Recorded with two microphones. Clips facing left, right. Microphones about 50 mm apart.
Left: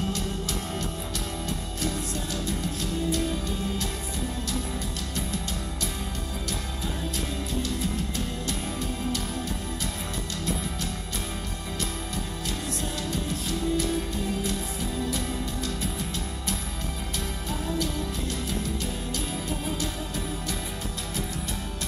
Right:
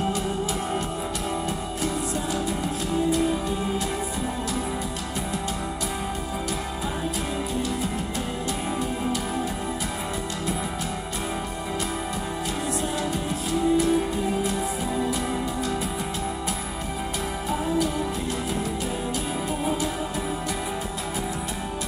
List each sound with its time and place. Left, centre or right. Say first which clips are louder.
2.4 s music: right 4 dB; centre
13.1 s music: right 4 dB; centre
17.5 s music: right 6 dB; centre
19.6 s music: right 5 dB; centre